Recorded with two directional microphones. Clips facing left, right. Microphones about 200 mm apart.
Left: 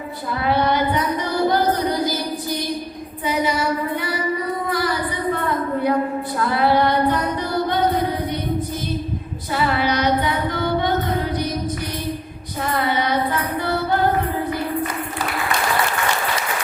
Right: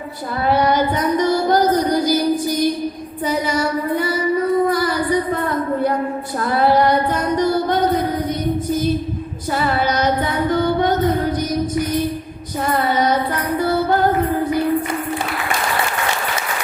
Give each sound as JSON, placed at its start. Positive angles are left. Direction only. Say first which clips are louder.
{"t": 0.4, "sound": "child singing", "louder": "right 3 dB", "side_deg": -40}
{"t": 1.5, "sound": "music", "louder": "right 3 dB", "side_deg": -45}
{"t": 3.2, "sound": "child singing", "louder": "right 1 dB", "side_deg": -45}
{"t": 6.5, "sound": "female singing", "louder": "right 3 dB", "side_deg": -45}
{"t": 9.7, "sound": "female singing", "louder": "right 1 dB", "side_deg": -45}
{"t": 12.9, "sound": "child singing", "louder": "right 6 dB", "side_deg": -40}